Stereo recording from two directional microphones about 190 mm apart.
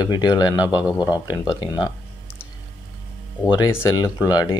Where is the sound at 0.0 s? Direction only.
20° left (ahead or behind).